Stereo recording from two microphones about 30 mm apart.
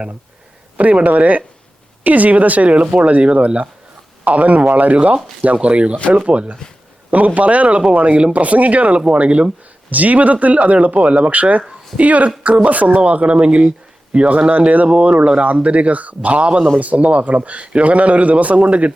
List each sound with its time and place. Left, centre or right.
1.0 s speech: right
2.6 s speech: right
4.9 s speech: right
7.1 s speech: right
9.9 s speech: right
13.0 s speech: right
14.8 s speech: right
16.8 s speech: right